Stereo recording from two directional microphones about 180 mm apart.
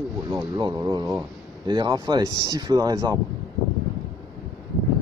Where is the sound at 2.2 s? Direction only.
20° left (ahead or behind).